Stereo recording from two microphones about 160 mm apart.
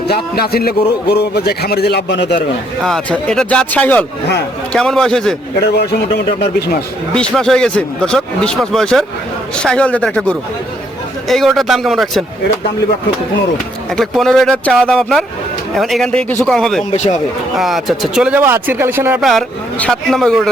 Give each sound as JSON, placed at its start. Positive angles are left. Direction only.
{"t": 0.1, "sound": "a man's voice", "side_deg": 75}
{"t": 2.8, "sound": "speech", "side_deg": 5}
{"t": 5.7, "sound": "a man's voice", "side_deg": 90}
{"t": 7.1, "sound": "speech", "side_deg": 5}
{"t": 13.9, "sound": "speech", "side_deg": 0}
{"t": 16.9, "sound": "speech", "side_deg": 45}
{"t": 17.6, "sound": "speech", "side_deg": 0}
{"t": 19.2, "sound": "speech", "side_deg": 0}